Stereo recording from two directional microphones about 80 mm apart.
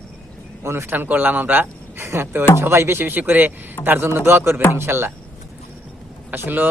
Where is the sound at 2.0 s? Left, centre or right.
Right.